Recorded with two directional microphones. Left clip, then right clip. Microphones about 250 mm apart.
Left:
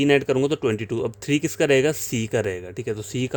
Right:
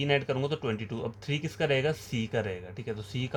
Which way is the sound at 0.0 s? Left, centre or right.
Left.